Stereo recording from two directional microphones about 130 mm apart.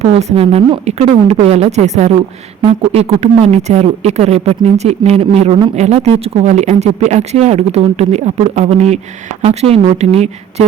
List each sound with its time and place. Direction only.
0.0 s a woman's voice: 55° right (ahead or behind)